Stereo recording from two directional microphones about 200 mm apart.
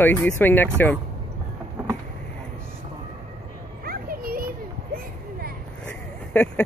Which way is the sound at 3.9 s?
45° right (ahead or behind).